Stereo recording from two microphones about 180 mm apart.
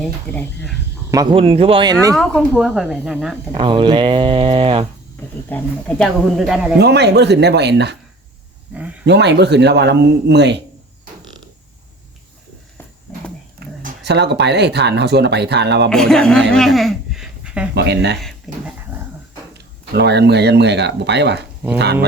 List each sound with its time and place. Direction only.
0.0 s speech: 5° left (ahead or behind)
1.1 s speech: 25° right (ahead or behind)
2.1 s speech: centre (ahead or behind)
3.5 s speech: 25° right (ahead or behind)
5.5 s speech: 10° left (ahead or behind)
6.3 s speech: centre (ahead or behind)
6.7 s a man's voice: 65° right (ahead or behind)
9.0 s a man's voice: 70° right (ahead or behind)
13.6 s speech: 65° right (ahead or behind)
15.9 s speech: 5° left (ahead or behind)
16.5 s a sound: centre (ahead or behind)
17.7 s a man's voice: 70° right (ahead or behind)
18.2 s speech: centre (ahead or behind)
19.5 s speech: 70° right (ahead or behind)